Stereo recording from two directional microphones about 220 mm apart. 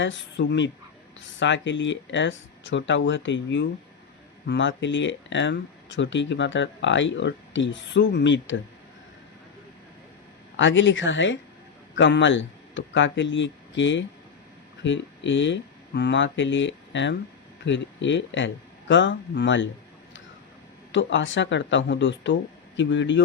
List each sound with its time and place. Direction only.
0.0 s speech: 55° left (ahead or behind)
10.6 s speech: 60° left (ahead or behind)
20.9 s speech: 55° left (ahead or behind)